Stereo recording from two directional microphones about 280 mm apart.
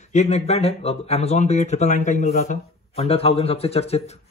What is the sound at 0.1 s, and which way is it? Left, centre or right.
Speech, left.